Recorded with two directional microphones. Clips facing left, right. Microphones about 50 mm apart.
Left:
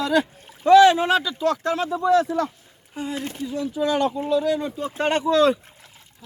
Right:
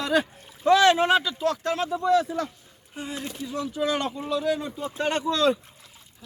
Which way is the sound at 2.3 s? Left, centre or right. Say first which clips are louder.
Left 5 dB; left.